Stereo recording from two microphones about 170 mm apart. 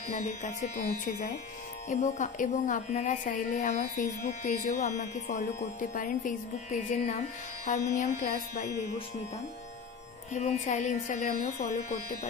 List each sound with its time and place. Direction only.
0.1 s speech: 45° left (ahead or behind)
10.3 s speech: 40° left (ahead or behind)